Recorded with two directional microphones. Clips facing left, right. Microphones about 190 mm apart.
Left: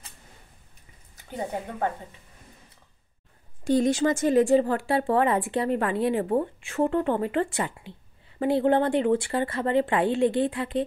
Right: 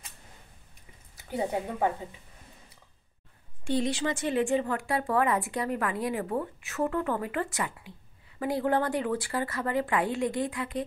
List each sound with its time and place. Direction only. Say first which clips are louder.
1.1 s a woman's voice: right 2 dB; 10° right (ahead or behind)
3.6 s speech: left 6 dB; 45° left (ahead or behind); by 10.8 s 30° left (ahead or behind)